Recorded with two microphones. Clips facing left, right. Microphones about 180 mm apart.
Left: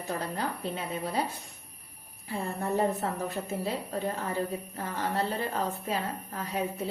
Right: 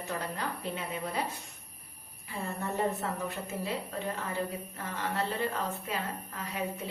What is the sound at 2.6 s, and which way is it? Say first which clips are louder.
A woman's voice: left 4 dB; 35° left (ahead or behind).